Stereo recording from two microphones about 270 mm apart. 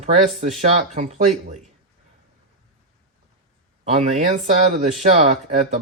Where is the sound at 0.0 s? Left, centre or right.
Right.